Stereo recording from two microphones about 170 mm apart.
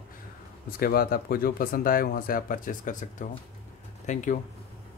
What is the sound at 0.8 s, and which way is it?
Speech, 60° left (ahead or behind).